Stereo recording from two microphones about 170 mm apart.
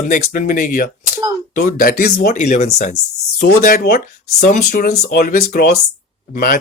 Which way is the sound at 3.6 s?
55° left (ahead or behind).